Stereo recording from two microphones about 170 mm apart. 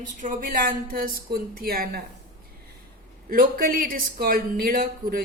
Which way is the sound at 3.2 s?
60° right (ahead or behind).